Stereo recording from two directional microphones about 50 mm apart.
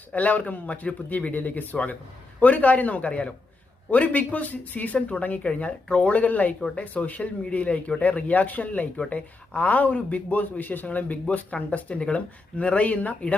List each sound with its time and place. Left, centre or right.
0.1 s speech: left